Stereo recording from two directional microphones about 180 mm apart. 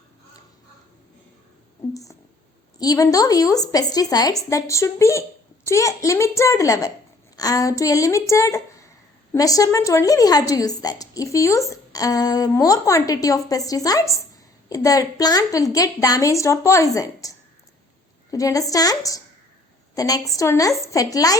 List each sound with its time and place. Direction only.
2.7 s a woman's voice: 20° left (ahead or behind)